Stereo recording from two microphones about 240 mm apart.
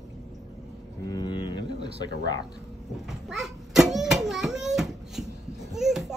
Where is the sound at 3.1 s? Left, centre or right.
Centre.